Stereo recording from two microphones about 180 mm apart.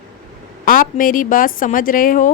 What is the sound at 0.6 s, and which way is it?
A woman's voice, 50° left (ahead or behind).